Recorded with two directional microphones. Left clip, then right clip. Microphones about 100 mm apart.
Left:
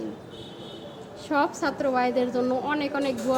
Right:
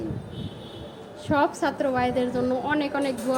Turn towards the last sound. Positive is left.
turn(degrees=25)  # may be behind; listen again after turning